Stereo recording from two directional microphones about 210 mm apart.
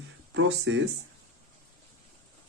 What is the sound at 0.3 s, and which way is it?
Speech, 60° right (ahead or behind).